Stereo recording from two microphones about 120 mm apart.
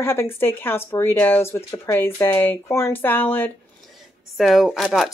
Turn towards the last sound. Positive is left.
turn(degrees=0)  # may be behind; listen again after turning